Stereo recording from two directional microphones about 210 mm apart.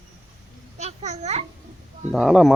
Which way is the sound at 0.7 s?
30° right (ahead or behind).